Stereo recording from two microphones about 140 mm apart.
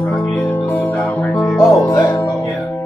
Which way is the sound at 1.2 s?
5° left (ahead or behind).